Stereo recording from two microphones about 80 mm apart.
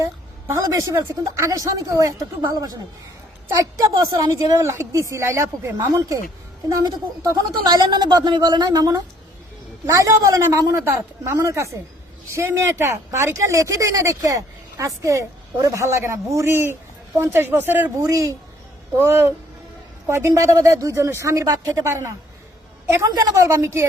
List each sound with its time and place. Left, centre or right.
0.0 s a woman's voice: right
18.0 s a woman's voice: right
18.9 s speech: right
21.8 s speech: right
23.0 s speech: right